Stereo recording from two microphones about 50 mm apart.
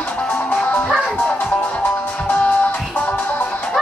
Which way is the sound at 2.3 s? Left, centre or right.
Left.